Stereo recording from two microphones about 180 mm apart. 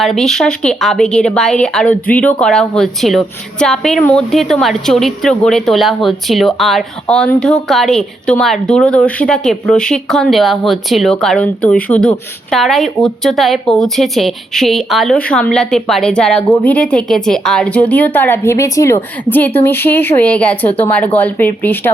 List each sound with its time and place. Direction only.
0.0 s speech: centre (ahead or behind)